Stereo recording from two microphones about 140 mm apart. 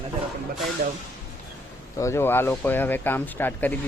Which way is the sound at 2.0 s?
20° left (ahead or behind).